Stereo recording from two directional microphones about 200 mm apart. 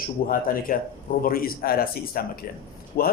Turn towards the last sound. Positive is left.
turn(degrees=50)  # may be behind; listen again after turning